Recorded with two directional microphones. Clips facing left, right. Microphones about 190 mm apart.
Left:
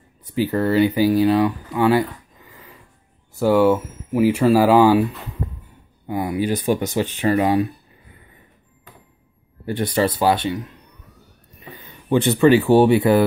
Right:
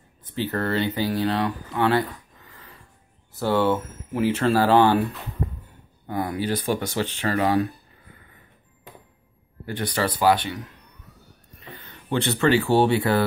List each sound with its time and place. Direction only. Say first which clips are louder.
0.3 s speech: left 6 dB; 10° left (ahead or behind)
3.3 s speech: left 6 dB; 10° left (ahead or behind)
6.0 s speech: left 4 dB; 10° left (ahead or behind)
9.7 s speech: left 6 dB; 25° left (ahead or behind)
11.6 s speech: left 3 dB; 15° left (ahead or behind)